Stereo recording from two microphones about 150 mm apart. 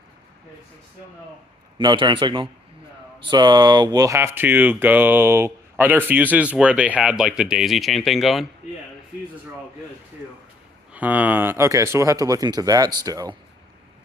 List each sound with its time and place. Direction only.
1.8 s a man's voice: 30° right (ahead or behind); by 8.4 s centre (ahead or behind)
10.9 s speech: 10° right (ahead or behind); by 13.3 s 25° right (ahead or behind)